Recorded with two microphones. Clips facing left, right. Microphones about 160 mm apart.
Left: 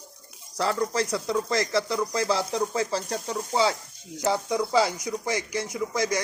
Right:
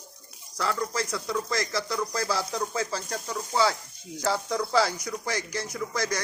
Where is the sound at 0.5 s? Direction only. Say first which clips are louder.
Left 4 dB; 30° left (ahead or behind).